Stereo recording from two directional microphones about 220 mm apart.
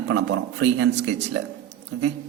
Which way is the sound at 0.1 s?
55° right (ahead or behind).